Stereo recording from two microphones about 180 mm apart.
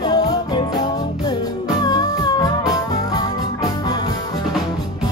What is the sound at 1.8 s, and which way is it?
Music, 20° left (ahead or behind).